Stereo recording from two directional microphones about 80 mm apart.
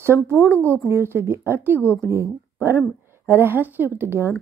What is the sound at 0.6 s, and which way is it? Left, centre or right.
A woman's voice, right.